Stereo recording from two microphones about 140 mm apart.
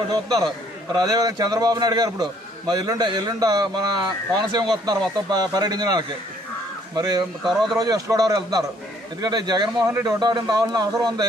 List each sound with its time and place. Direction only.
0.1 s a man's voice: 30° right (ahead or behind)
7.4 s speech: centre (ahead or behind)
7.8 s a man's voice: 25° right (ahead or behind)